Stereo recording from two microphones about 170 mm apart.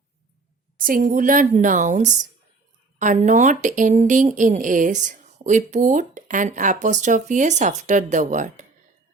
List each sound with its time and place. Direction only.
0.9 s speech: 50° right (ahead or behind)